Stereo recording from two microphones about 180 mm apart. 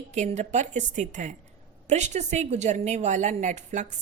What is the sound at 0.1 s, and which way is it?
A woman's voice, 40° right (ahead or behind).